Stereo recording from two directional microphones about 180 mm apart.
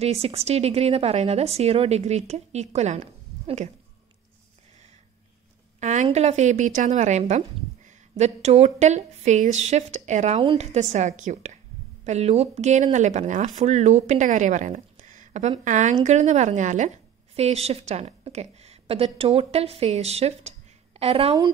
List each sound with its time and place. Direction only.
0.0 s a woman's voice: 35° right (ahead or behind)
5.8 s a woman's voice: 40° right (ahead or behind)